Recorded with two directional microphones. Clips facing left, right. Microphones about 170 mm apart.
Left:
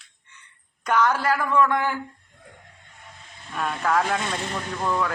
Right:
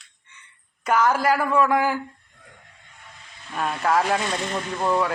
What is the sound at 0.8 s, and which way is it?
Speech, 10° right (ahead or behind).